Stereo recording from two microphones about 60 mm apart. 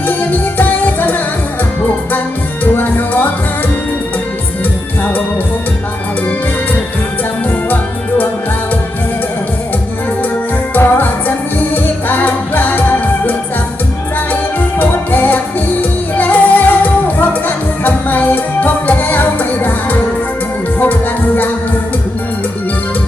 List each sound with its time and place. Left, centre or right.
0.1 s music: left
2.7 s music: left
10.8 s music: left
14.8 s music: left